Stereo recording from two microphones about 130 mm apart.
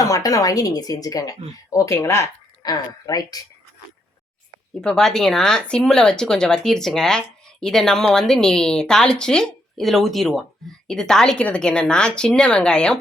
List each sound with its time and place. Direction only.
0.0 s speech: 25° left (ahead or behind)
4.7 s a woman's voice: 5° left (ahead or behind)